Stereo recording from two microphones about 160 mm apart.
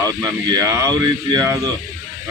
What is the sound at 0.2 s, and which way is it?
A man's voice, 25° right (ahead or behind).